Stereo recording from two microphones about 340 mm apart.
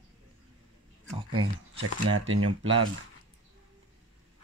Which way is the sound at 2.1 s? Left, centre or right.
Right.